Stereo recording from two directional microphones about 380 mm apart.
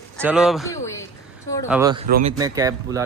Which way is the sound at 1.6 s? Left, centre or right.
Centre.